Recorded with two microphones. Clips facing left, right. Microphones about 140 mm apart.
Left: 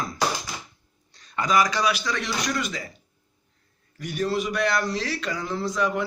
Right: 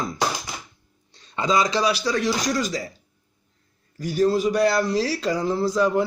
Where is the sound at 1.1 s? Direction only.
25° right (ahead or behind).